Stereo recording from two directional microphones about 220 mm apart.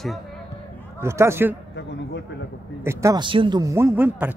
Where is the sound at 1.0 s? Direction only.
10° right (ahead or behind).